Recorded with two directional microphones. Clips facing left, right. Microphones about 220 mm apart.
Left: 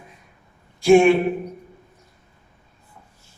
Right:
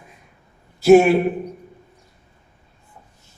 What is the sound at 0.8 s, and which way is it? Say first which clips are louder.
Speech: right 2 dB; 5° right (ahead or behind).